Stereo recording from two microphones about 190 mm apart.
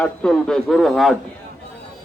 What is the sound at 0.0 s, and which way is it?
A man's voice, 5° left (ahead or behind).